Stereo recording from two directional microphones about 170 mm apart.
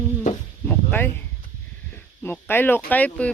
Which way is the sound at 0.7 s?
10° left (ahead or behind).